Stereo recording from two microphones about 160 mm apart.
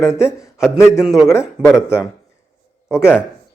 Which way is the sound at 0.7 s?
20° left (ahead or behind).